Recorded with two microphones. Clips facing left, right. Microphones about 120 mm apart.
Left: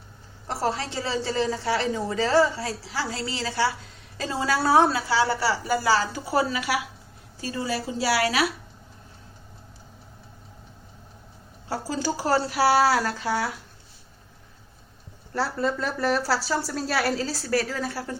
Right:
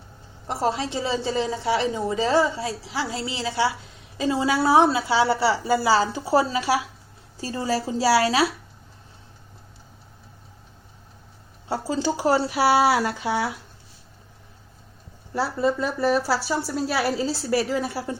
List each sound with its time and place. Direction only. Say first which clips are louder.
0.4 s a woman's voice: right 2 dB; 20° right (ahead or behind)
11.7 s a woman's voice: right 3 dB; 25° right (ahead or behind)
15.3 s speech: right 3 dB; 5° right (ahead or behind)
17.0 s a woman's voice: right 2 dB; 15° right (ahead or behind)